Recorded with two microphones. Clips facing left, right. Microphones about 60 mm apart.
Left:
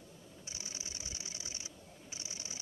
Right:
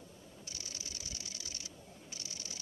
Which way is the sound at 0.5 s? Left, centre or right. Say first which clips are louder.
Left 1 dB; left.